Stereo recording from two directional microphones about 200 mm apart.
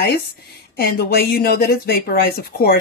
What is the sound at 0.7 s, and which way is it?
A woman's voice, 50° left (ahead or behind).